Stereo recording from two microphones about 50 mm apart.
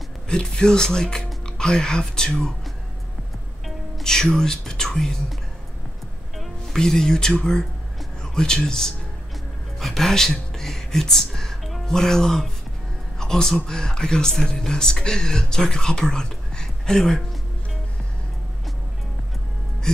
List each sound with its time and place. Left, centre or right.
0.3 s speech: centre
3.6 s speech: centre
6.3 s music: centre
6.8 s speech: centre